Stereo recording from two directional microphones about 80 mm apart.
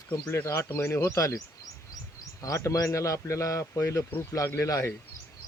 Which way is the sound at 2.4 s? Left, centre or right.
Left.